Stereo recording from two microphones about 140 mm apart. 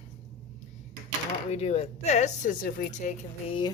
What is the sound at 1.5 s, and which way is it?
Speech, 50° left (ahead or behind).